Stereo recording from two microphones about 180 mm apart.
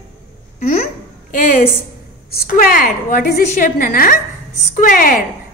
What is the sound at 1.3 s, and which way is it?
A woman's voice, 50° left (ahead or behind).